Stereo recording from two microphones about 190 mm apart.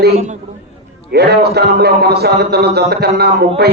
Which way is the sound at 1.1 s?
60° right (ahead or behind).